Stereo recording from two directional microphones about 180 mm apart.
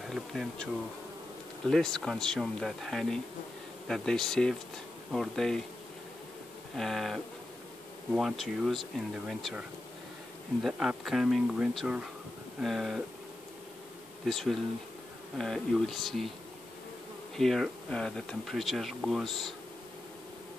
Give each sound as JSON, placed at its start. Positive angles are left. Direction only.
{"t": 0.1, "sound": "speech", "side_deg": 0}
{"t": 1.7, "sound": "speech", "side_deg": 5}
{"t": 6.8, "sound": "speech", "side_deg": 0}
{"t": 14.2, "sound": "speech", "side_deg": 0}
{"t": 17.4, "sound": "speech", "side_deg": 0}